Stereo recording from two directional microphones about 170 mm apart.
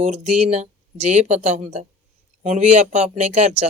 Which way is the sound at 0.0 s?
45° right (ahead or behind).